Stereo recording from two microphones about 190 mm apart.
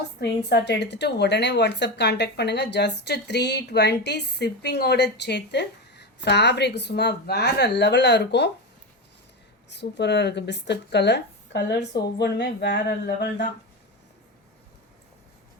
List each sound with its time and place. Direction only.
0.2 s a woman's voice: 60° left (ahead or behind)
9.6 s a woman's voice: 65° left (ahead or behind)